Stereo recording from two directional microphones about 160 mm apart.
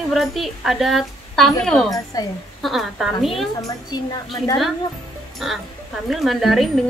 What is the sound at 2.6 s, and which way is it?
Speech, centre (ahead or behind).